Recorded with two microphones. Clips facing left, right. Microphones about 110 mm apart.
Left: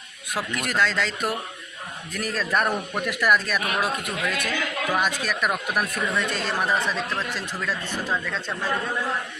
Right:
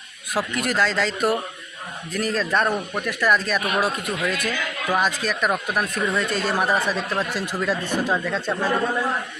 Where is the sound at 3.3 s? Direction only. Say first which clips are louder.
Right 2 dB; 5° left (ahead or behind); by 8.5 s 15° right (ahead or behind).